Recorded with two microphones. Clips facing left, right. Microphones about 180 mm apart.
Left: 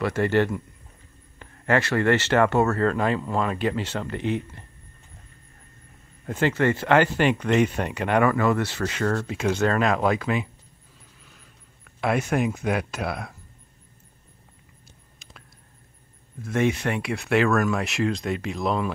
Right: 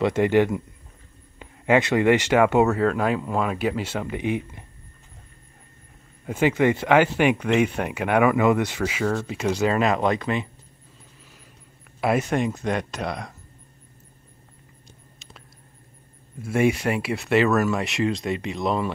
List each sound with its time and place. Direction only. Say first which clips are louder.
0.0 s speech: right 3 dB; 20° right (ahead or behind)
6.2 s speech: right 2 dB; 10° right (ahead or behind)
12.0 s speech: right 1 dB; centre (ahead or behind)
16.3 s speech: right 2 dB; 10° right (ahead or behind)